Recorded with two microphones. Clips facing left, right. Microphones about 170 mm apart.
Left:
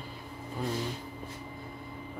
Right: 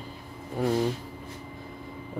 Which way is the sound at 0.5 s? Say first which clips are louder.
Right 8 dB; 65° right (ahead or behind).